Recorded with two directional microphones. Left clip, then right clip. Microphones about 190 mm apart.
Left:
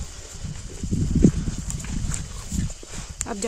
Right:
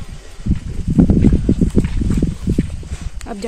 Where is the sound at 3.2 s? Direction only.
10° left (ahead or behind).